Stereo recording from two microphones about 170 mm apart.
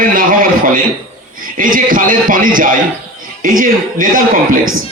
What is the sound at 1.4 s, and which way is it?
A man's voice, 55° right (ahead or behind).